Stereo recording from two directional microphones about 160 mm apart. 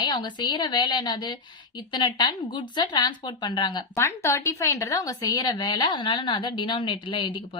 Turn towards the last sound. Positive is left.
turn(degrees=30)  # may be behind; listen again after turning